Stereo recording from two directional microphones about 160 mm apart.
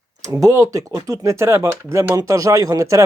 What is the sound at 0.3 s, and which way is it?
Speech, 20° right (ahead or behind).